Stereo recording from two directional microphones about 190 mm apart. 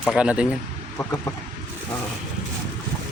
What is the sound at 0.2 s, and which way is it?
Speech, 5° right (ahead or behind).